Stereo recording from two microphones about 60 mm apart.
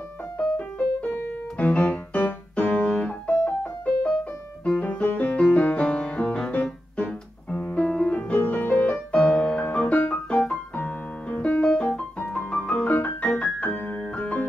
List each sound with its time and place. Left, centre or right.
0.4 s music: centre
4.1 s music: centre
4.7 s music: left
8.4 s music: left
10.3 s music: centre
10.7 s keyboard: left
11.6 s piano: centre